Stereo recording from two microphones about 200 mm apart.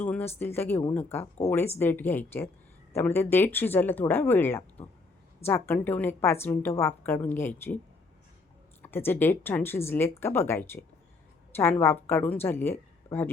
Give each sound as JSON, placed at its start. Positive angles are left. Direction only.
{"t": 0.0, "sound": "a woman's voice", "side_deg": 10}
{"t": 8.8, "sound": "a woman's voice", "side_deg": 10}